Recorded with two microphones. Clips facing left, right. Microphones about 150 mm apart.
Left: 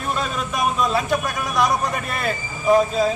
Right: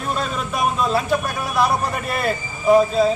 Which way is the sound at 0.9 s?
5° right (ahead or behind).